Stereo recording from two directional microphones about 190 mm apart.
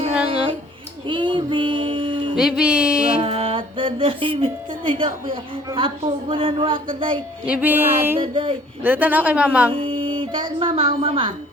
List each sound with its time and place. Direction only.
1.0 s a sound: 25° right (ahead or behind)
2.3 s music: 5° right (ahead or behind)
3.2 s music: 30° right (ahead or behind)
5.7 s a woman's voice: 25° right (ahead or behind)
7.4 s a woman's voice: 10° right (ahead or behind)
8.2 s a woman's voice: 30° right (ahead or behind)
8.8 s a woman's voice: 10° right (ahead or behind)
9.7 s speech: 30° right (ahead or behind)